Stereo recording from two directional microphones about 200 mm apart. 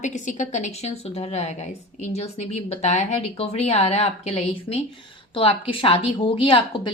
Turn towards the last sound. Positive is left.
turn(degrees=25)  # may be behind; listen again after turning